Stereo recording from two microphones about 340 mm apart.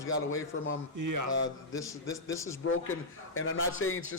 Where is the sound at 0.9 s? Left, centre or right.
Right.